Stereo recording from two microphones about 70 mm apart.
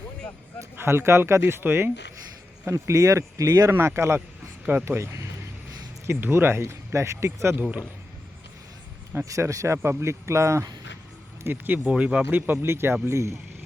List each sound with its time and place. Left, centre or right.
0.8 s speech: right
2.6 s speech: right
3.7 s speech: right
7.5 s speech: right
9.2 s speech: right
11.4 s speech: right
12.3 s speech: right